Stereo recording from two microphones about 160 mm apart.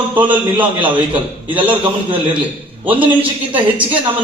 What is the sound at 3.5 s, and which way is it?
Speech, 10° right (ahead or behind).